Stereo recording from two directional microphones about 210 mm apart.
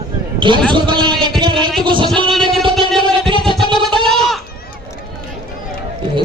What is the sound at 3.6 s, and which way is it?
Music, centre (ahead or behind).